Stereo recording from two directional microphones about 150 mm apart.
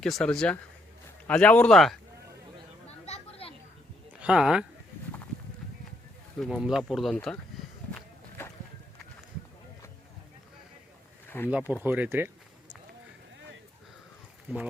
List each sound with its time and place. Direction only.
0.0 s speech: 5° left (ahead or behind)
2.8 s a sound: 40° left (ahead or behind)
4.2 s speech: 5° right (ahead or behind)
6.4 s speech: centre (ahead or behind)
11.4 s speech: 10° right (ahead or behind)
14.5 s speech: 10° right (ahead or behind)